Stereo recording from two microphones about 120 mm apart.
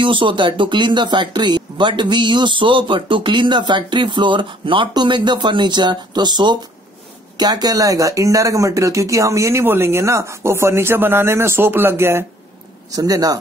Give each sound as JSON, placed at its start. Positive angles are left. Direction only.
{"t": 0.0, "sound": "speech", "side_deg": -45}